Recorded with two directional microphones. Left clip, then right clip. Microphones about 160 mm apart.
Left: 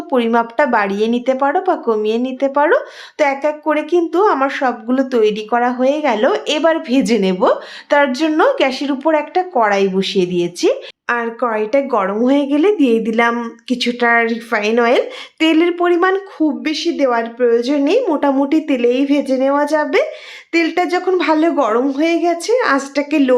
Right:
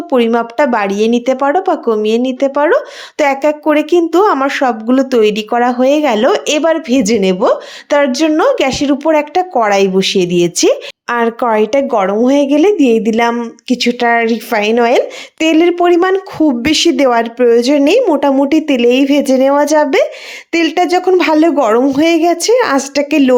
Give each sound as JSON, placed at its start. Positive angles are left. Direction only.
{"t": 0.1, "sound": "a woman's voice", "side_deg": -25}
{"t": 11.9, "sound": "speech", "side_deg": -20}
{"t": 12.2, "sound": "speech", "side_deg": -30}
{"t": 16.4, "sound": "a woman's voice", "side_deg": -50}
{"t": 18.0, "sound": "a woman's voice", "side_deg": -30}